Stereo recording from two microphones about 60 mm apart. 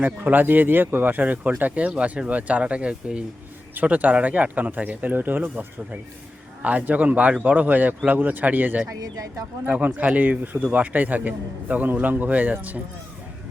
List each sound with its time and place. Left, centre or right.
0.0 s speech: right
8.9 s speech: right
9.6 s speech: right